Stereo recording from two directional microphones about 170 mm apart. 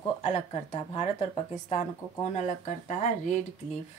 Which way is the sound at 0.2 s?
40° left (ahead or behind).